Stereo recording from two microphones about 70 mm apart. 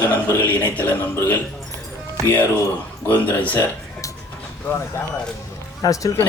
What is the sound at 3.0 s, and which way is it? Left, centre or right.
Speech, left.